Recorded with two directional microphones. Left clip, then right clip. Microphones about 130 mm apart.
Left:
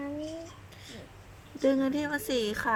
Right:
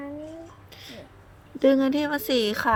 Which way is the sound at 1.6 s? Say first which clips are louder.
Right 6 dB; 40° right (ahead or behind).